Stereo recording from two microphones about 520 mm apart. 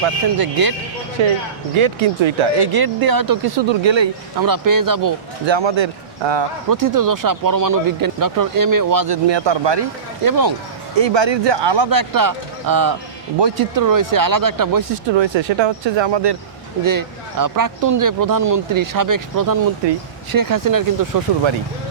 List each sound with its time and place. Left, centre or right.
0.3 s speech: right
1.2 s speech: right
2.7 s speech: right
4.4 s speech: right
5.5 s speech: right
6.7 s speech: right
10.2 s speech: right
11.0 s speech: right
15.1 s speech: right
16.8 s speech: right